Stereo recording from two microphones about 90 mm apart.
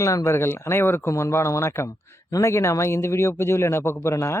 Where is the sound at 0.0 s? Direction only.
35° left (ahead or behind).